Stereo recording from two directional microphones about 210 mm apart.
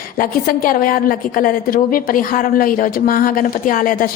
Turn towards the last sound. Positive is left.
turn(degrees=40)  # may be behind; listen again after turning